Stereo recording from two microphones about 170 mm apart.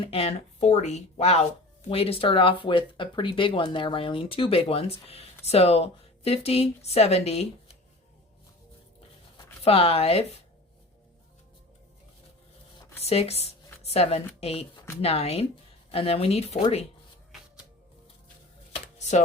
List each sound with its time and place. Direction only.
0.0 s speech: 35° left (ahead or behind)
9.6 s speech: 35° left (ahead or behind)
13.0 s speech: 35° left (ahead or behind)
18.7 s a sound: 45° left (ahead or behind)